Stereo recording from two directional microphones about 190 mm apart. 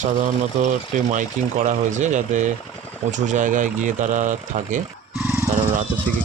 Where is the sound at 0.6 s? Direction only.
40° right (ahead or behind).